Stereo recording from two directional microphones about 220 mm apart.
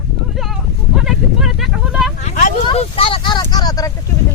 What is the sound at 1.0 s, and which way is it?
Speech, centre (ahead or behind).